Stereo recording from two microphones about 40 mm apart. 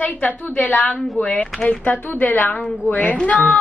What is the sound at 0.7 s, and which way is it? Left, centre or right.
Speech, left.